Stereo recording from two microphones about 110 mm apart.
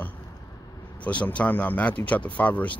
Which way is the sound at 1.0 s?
10° left (ahead or behind).